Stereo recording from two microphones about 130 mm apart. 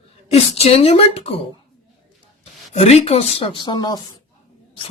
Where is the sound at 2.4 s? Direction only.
55° left (ahead or behind); by 4.0 s 35° left (ahead or behind).